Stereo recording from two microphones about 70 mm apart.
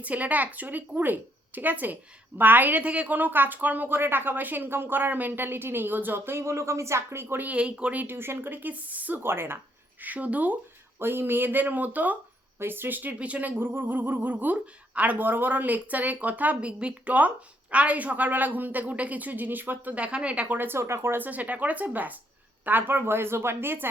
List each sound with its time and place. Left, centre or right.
0.0 s speech: right
7.4 s speech: centre
8.0 s speech: right
10.0 s speech: right
13.6 s speech: right
20.6 s speech: right